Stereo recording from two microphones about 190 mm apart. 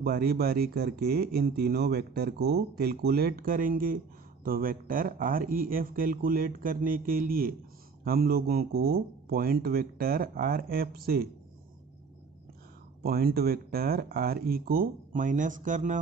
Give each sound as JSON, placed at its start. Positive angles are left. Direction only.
{"t": 0.0, "sound": "speech", "side_deg": -55}
{"t": 13.0, "sound": "speech", "side_deg": -55}